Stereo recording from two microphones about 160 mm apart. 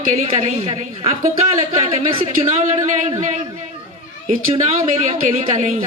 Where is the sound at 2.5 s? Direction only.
50° right (ahead or behind).